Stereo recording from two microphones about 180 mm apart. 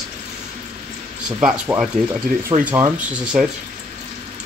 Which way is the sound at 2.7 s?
10° right (ahead or behind).